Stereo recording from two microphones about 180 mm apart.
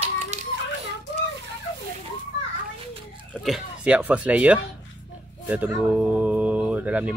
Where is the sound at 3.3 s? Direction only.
Centre (ahead or behind).